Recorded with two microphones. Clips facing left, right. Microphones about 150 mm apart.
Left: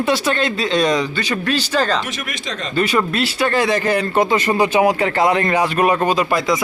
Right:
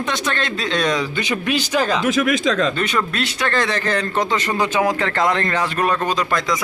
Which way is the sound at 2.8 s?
5° left (ahead or behind).